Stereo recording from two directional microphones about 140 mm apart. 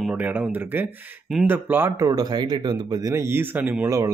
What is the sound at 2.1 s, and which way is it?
Speech, 30° right (ahead or behind).